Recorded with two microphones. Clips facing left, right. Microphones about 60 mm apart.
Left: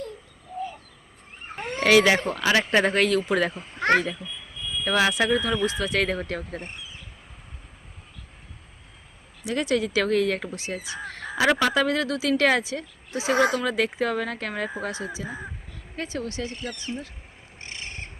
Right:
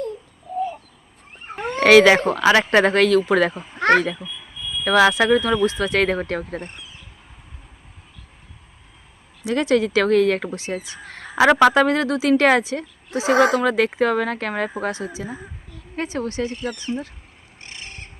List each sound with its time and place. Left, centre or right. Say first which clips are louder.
1.8 s speech: right 7 dB; right
2.4 s speech: right 4 dB; right
3.5 s a child's voice: right 4 dB; centre
3.8 s a child's voice: right 5 dB; right
4.2 s a sound: right 2 dB; centre
4.9 s speech: right 7 dB; right
9.5 s speech: right 6 dB; right
11.3 s speech: right 8 dB; right
11.7 s speech: right 6 dB; right
13.3 s speech: right 5 dB; right
13.6 s speech: right 6 dB; right